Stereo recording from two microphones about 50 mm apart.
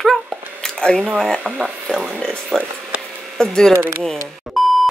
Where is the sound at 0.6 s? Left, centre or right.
Centre.